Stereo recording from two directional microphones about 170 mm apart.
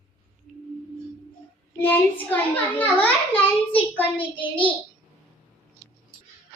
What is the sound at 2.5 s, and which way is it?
Child singing, 10° left (ahead or behind).